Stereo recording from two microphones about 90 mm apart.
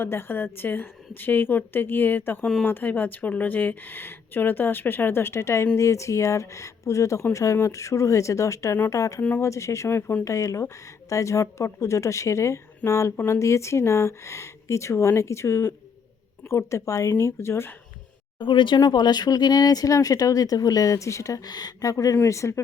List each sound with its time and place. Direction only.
0.0 s a woman's voice: 25° left (ahead or behind)
18.3 s speech: 65° left (ahead or behind)
18.8 s speech: 50° left (ahead or behind); by 22.6 s 35° left (ahead or behind)